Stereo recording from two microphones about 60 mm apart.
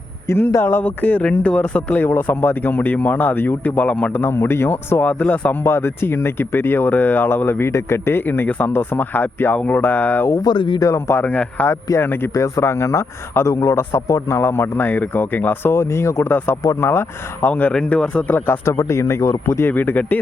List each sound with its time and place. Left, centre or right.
0.3 s a man's voice: left
0.6 s speech: left
2.0 s a man's voice: left
5.0 s speech: left
5.6 s speech: left
7.6 s speech: left
10.2 s speech: left
11.2 s speech: left
11.9 s speech: left
12.3 s a man's voice: left
15.7 s a man's voice: left
17.5 s speech: left
18.3 s speech: left
19.6 s speech: left